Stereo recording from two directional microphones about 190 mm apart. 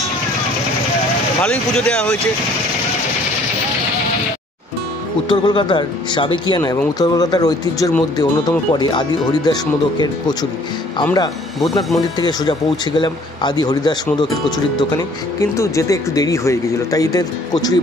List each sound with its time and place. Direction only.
1.4 s speech: 5° left (ahead or behind)
5.3 s speech: 25° left (ahead or behind)
12.2 s speech: 20° left (ahead or behind)
15.5 s speech: 15° left (ahead or behind)